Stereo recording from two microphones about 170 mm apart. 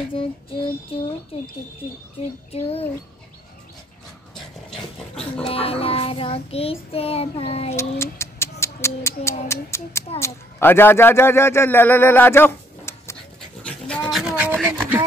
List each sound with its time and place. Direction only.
0.9 s child singing: 30° left (ahead or behind)
2.5 s child singing: 35° left (ahead or behind)
4.6 s a sound: 5° left (ahead or behind)
5.5 s child singing: 35° left (ahead or behind)
7.7 s cat: 15° left (ahead or behind)
9.5 s a child's voice: 15° left (ahead or behind)
13.6 s dog: 5° left (ahead or behind); by 15.0 s 10° right (ahead or behind)